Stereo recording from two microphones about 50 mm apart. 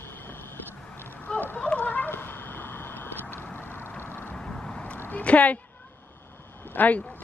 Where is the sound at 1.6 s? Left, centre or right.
Left.